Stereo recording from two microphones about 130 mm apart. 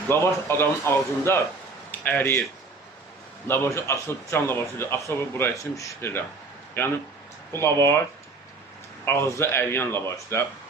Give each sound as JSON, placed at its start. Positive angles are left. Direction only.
{"t": 0.1, "sound": "speech", "side_deg": 20}
{"t": 3.4, "sound": "speech", "side_deg": 20}
{"t": 7.5, "sound": "speech", "side_deg": 20}
{"t": 9.0, "sound": "speech", "side_deg": 20}